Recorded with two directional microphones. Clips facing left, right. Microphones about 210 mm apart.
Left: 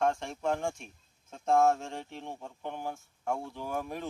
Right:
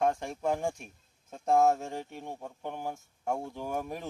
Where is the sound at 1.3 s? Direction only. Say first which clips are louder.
Right 1 dB; 5° right (ahead or behind).